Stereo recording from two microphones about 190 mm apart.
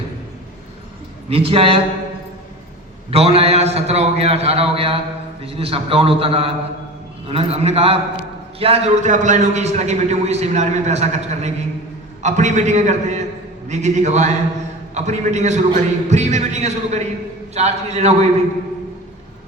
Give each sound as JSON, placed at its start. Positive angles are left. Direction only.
{"t": 1.3, "sound": "speech", "side_deg": -30}
{"t": 3.1, "sound": "a man's voice", "side_deg": -30}